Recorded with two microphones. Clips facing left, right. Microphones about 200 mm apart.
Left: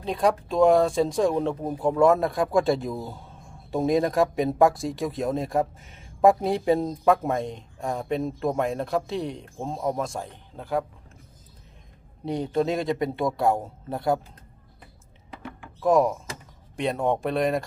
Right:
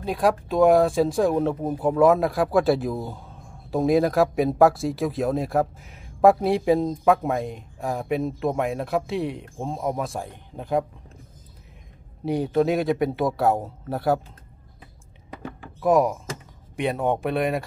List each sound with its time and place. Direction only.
0.0 s speech: 5° right (ahead or behind)
10.3 s speech: 15° right (ahead or behind)
12.3 s speech: 5° right (ahead or behind)
15.8 s speech: 5° right (ahead or behind)